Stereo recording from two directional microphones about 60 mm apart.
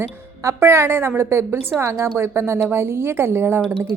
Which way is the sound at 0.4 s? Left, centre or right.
Right.